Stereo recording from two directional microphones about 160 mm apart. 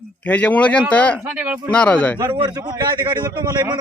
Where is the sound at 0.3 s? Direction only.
10° left (ahead or behind).